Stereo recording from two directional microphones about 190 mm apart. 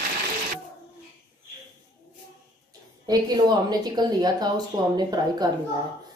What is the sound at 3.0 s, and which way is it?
A woman's voice, 20° right (ahead or behind).